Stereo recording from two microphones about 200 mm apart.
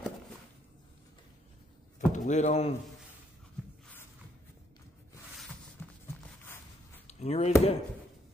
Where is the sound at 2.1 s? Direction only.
35° left (ahead or behind).